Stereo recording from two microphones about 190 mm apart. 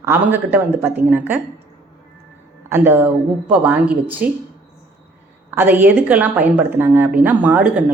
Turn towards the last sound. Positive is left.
turn(degrees=-5)  # may be behind; listen again after turning